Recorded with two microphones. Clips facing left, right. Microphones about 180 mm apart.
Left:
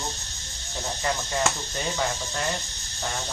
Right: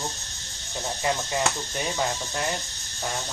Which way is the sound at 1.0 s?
15° right (ahead or behind).